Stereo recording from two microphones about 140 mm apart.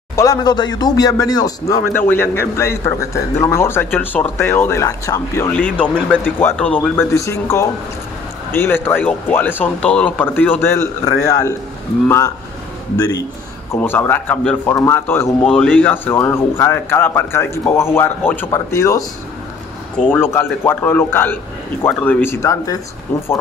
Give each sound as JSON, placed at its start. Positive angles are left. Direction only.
{"t": 0.1, "sound": "speech", "side_deg": 25}
{"t": 5.5, "sound": "speech", "side_deg": 10}
{"t": 12.9, "sound": "speech", "side_deg": 25}
{"t": 13.7, "sound": "speech", "side_deg": 15}
{"t": 14.7, "sound": "speech", "side_deg": 20}